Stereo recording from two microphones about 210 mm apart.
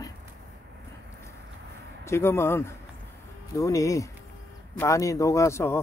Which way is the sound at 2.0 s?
15° left (ahead or behind).